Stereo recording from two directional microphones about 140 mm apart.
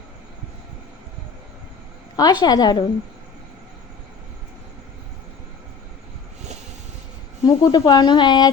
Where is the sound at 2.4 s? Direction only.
30° left (ahead or behind).